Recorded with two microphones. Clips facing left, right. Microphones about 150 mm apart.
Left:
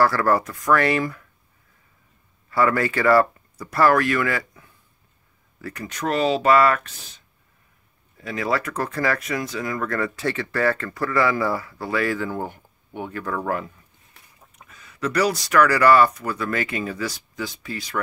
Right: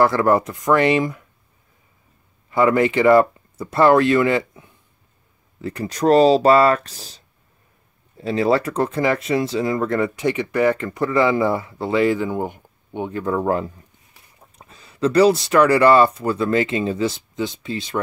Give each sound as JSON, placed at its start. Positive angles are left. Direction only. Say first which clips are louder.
{"t": 0.0, "sound": "speech", "louder": "right 3 dB", "side_deg": -20}
{"t": 2.5, "sound": "speech", "louder": "right 4 dB", "side_deg": -20}